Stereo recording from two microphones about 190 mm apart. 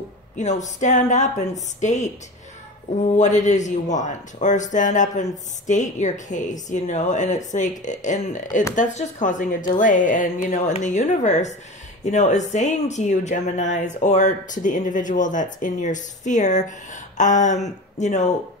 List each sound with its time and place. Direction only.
0.4 s speech: 40° left (ahead or behind)
3.2 s speech: 40° left (ahead or behind)